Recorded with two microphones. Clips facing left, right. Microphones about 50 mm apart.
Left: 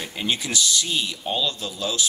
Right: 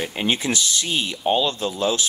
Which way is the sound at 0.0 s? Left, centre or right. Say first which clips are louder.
Right 4 dB; right.